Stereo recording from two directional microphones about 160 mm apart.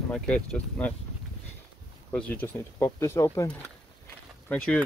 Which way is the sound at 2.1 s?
10° left (ahead or behind).